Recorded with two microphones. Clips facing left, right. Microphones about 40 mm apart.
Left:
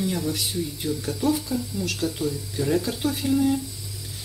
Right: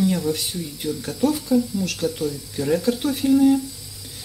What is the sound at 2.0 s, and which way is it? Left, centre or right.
Speech, centre.